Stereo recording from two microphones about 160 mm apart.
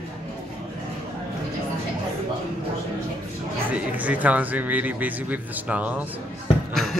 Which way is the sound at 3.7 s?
10° right (ahead or behind).